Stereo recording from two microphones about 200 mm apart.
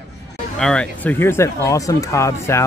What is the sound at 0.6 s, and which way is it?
Speech, 5° left (ahead or behind).